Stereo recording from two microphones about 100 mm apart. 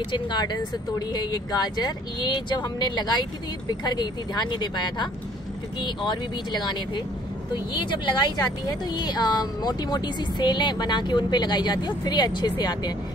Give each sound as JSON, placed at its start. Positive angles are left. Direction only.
{"t": 0.1, "sound": "speech", "side_deg": 50}
{"t": 7.5, "sound": "speech", "side_deg": 50}